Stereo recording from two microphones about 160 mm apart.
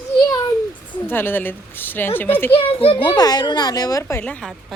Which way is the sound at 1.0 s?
15° left (ahead or behind).